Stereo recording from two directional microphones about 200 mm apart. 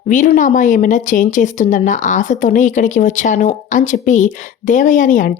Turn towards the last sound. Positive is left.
turn(degrees=40)  # may be behind; listen again after turning